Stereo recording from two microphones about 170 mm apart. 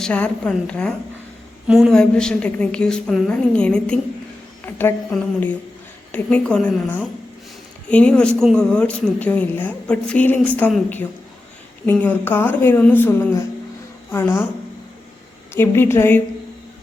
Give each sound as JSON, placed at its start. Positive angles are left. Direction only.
{"t": 0.0, "sound": "a woman's voice", "side_deg": 5}
{"t": 15.5, "sound": "a woman's voice", "side_deg": 15}